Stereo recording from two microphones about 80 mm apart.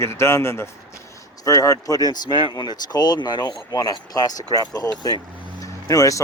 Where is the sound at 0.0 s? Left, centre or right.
Left.